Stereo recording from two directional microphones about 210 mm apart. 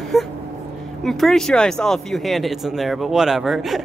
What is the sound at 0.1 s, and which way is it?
Speech, centre (ahead or behind).